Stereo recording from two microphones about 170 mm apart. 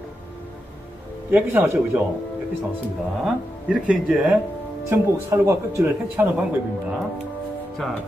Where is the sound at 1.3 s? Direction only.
10° right (ahead or behind).